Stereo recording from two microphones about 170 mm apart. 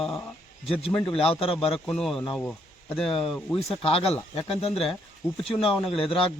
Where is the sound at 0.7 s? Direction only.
35° left (ahead or behind).